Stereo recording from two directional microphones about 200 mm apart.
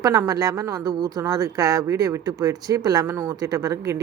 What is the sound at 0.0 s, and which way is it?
A woman's voice, 15° right (ahead or behind).